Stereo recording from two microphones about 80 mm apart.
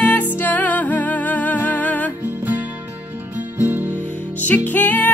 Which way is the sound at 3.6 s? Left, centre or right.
Right.